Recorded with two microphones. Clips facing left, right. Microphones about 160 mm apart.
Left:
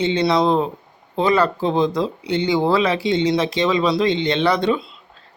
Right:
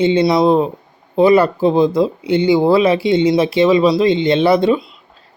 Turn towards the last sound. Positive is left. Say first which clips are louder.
# right 5 dB
turn(degrees=-10)  # may be behind; listen again after turning